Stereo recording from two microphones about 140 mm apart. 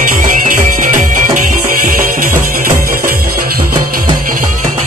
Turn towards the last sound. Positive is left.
turn(degrees=-75)  # may be behind; listen again after turning